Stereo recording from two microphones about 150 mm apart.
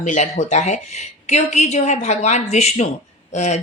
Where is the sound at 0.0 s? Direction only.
55° left (ahead or behind).